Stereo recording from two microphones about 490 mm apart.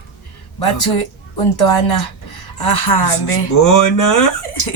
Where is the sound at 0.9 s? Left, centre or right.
Left.